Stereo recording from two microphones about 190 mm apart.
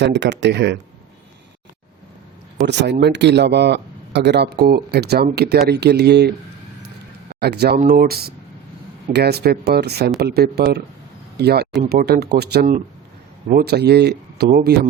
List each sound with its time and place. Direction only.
0.0 s speech: 65° right (ahead or behind)
2.6 s speech: 65° right (ahead or behind)
7.3 s speech: 55° right (ahead or behind)